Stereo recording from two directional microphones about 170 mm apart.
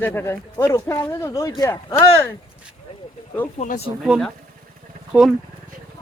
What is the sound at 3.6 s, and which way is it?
Speech, 40° left (ahead or behind).